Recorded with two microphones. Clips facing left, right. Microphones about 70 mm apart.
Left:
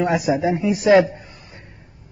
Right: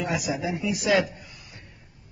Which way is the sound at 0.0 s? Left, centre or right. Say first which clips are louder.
Left 9 dB; left.